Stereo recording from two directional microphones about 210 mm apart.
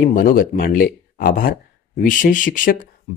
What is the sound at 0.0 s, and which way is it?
Speech, 40° left (ahead or behind).